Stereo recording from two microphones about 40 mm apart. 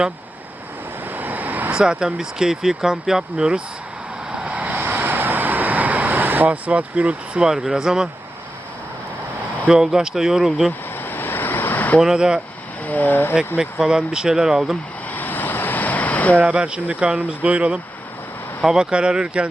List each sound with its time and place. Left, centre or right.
1.1 s vehicle: right
1.7 s speech: right
4.4 s vehicle: right
4.8 s vehicle: right
7.6 s speech: centre
9.6 s speech: centre
10.7 s vehicle: left
11.9 s speech: centre
12.8 s speech: left
13.8 s speech: right
15.1 s vehicle: left
16.8 s speech: right
18.6 s speech: centre